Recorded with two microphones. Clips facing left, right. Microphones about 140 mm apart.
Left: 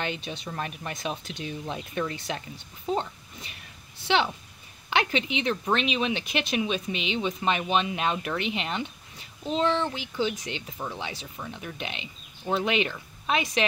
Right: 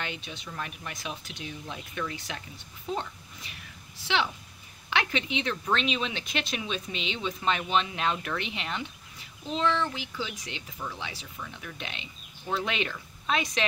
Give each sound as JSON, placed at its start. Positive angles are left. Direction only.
{"t": 0.5, "sound": "speech", "side_deg": 35}
{"t": 2.9, "sound": "speech", "side_deg": 25}
{"t": 4.8, "sound": "speech", "side_deg": 20}